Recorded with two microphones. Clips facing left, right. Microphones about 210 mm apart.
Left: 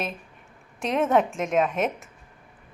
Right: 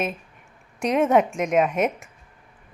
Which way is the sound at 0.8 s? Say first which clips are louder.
Right 3 dB; centre (ahead or behind).